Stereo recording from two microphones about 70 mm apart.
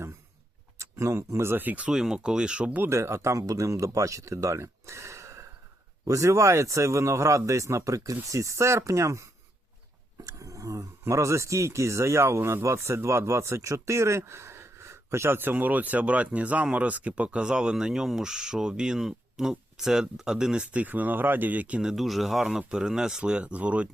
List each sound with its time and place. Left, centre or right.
0.8 s speech: right
1.9 s speech: centre
2.9 s speech: right
10.2 s a sound: right
11.0 s speech: right
21.8 s speech: centre